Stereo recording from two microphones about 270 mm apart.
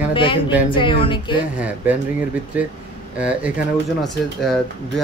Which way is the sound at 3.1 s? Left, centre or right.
Centre.